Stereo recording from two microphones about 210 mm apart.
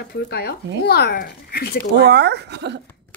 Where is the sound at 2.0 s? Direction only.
55° right (ahead or behind).